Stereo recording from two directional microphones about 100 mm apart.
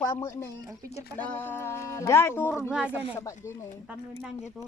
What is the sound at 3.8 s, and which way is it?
Speech, 5° right (ahead or behind).